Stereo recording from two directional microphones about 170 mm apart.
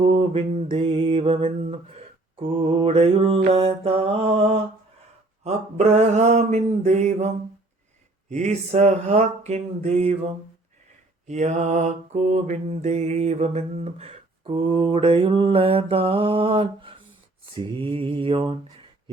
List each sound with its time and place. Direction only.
0.0 s mantra: 35° right (ahead or behind)
11.3 s mantra: 45° right (ahead or behind); by 19.1 s 30° right (ahead or behind)